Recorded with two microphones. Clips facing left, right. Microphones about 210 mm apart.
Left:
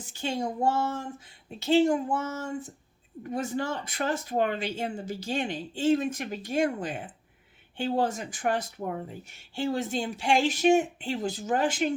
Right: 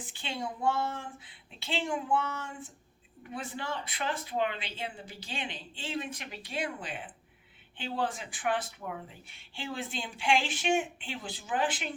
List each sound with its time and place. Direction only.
0.0 s speech: 40° left (ahead or behind)